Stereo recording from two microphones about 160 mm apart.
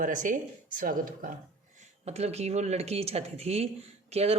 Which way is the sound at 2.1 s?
40° right (ahead or behind).